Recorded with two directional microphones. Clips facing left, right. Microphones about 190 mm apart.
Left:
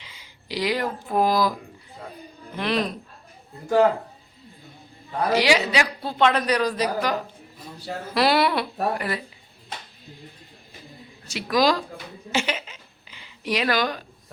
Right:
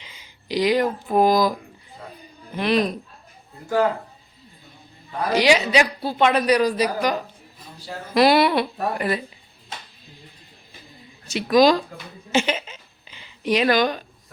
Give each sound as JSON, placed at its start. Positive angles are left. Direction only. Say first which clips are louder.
{"t": 0.0, "sound": "speech", "louder": "right 1 dB", "side_deg": -20}
{"t": 2.6, "sound": "speech", "louder": "right 4 dB", "side_deg": -15}
{"t": 5.3, "sound": "a woman's voice", "louder": "right 3 dB", "side_deg": -20}
{"t": 6.0, "sound": "speech", "louder": "right 2 dB", "side_deg": -10}
{"t": 11.3, "sound": "a woman's voice", "louder": "right 5 dB", "side_deg": -20}
{"t": 12.3, "sound": "a sound", "louder": "right 5 dB", "side_deg": -25}